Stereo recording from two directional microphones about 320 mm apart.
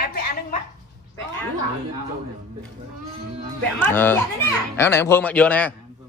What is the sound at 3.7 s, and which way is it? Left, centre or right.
A man's voice, centre.